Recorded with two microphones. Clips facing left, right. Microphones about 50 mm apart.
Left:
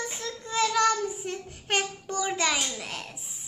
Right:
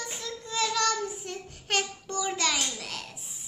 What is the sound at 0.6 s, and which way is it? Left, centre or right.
Child singing, centre.